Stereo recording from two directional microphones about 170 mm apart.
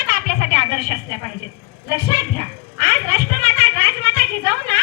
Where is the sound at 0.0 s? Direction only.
60° left (ahead or behind); by 1.0 s 40° left (ahead or behind).